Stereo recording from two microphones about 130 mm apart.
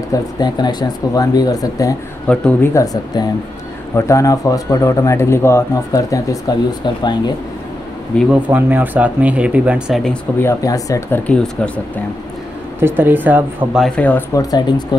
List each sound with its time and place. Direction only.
0.1 s speech: 30° left (ahead or behind)
2.2 s speech: 10° left (ahead or behind)
2.7 s speech: 30° left (ahead or behind)
8.3 s speech: 10° right (ahead or behind)
10.4 s speech: 25° left (ahead or behind)
11.2 s speech: 10° left (ahead or behind)
12.8 s speech: 15° right (ahead or behind)
13.7 s speech: 5° left (ahead or behind)
14.3 s speech: 30° left (ahead or behind)